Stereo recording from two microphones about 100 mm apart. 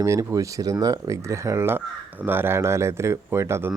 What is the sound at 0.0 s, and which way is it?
Speech, 30° right (ahead or behind).